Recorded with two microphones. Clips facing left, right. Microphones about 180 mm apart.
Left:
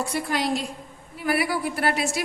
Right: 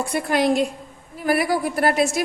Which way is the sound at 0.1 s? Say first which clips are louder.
Right 6 dB; 55° right (ahead or behind).